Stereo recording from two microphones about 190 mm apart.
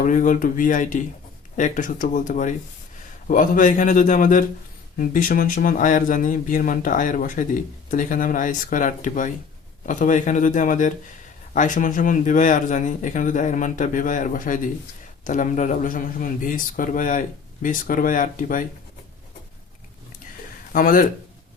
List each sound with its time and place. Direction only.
0.0 s speech: 45° left (ahead or behind)
20.7 s speech: 45° left (ahead or behind)